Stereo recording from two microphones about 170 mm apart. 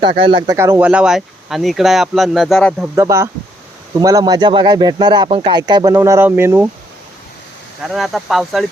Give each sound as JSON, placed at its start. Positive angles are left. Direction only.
{"t": 0.2, "sound": "speech", "side_deg": -30}
{"t": 0.5, "sound": "speech", "side_deg": -15}
{"t": 2.9, "sound": "speech", "side_deg": -15}
{"t": 7.9, "sound": "speech", "side_deg": 0}